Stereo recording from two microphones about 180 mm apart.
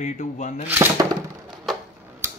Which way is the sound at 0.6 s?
10° right (ahead or behind).